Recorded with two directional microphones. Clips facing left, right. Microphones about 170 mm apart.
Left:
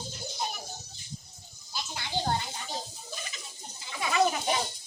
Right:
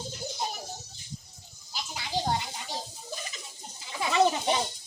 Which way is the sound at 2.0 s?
10° right (ahead or behind).